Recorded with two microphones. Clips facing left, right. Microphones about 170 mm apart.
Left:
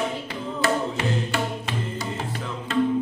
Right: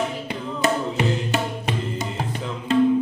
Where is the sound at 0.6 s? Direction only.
20° right (ahead or behind).